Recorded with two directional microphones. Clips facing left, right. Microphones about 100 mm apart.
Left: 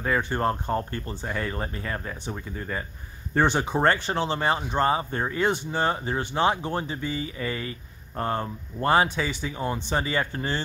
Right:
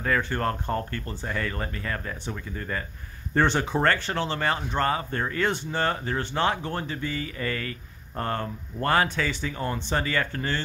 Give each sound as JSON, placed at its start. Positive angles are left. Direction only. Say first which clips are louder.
{"t": 0.1, "sound": "speech", "louder": "left 1 dB", "side_deg": 15}